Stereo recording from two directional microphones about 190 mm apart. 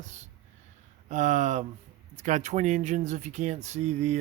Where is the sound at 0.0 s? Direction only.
40° right (ahead or behind).